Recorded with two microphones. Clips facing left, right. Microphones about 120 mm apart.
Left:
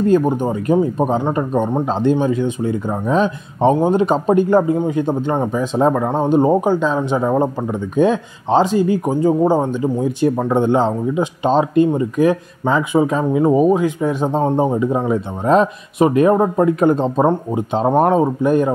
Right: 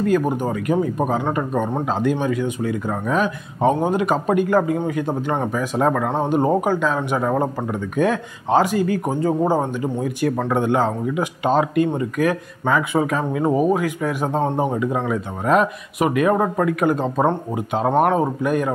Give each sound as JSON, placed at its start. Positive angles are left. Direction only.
{"t": 0.0, "sound": "speech", "side_deg": 25}
{"t": 10.5, "sound": "speech", "side_deg": 25}
{"t": 17.2, "sound": "speech", "side_deg": 10}